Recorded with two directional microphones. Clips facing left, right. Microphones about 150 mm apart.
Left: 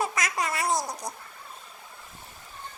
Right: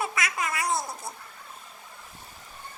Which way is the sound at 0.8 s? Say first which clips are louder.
Left 3 dB; 15° left (ahead or behind).